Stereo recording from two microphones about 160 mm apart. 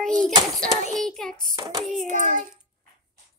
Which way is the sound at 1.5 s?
25° right (ahead or behind).